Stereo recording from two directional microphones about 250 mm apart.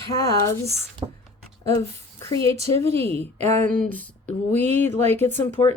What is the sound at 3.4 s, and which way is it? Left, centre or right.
Speech, right.